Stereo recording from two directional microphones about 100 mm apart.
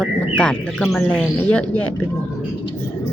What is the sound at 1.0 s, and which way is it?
Speech, 20° left (ahead or behind).